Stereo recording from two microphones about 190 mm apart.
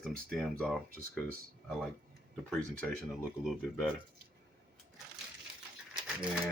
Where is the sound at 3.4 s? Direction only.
5° left (ahead or behind).